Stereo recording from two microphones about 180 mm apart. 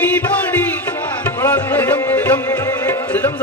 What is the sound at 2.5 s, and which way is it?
Music, 15° left (ahead or behind).